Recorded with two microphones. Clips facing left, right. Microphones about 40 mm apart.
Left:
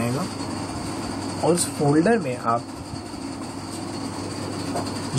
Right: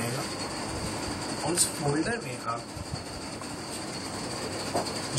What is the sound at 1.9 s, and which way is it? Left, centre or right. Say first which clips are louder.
Speech: left 11 dB; left.